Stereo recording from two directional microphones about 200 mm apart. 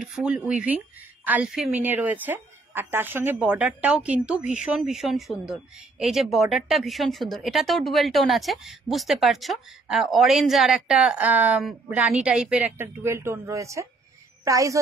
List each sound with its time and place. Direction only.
0.0 s a woman's voice: 5° right (ahead or behind)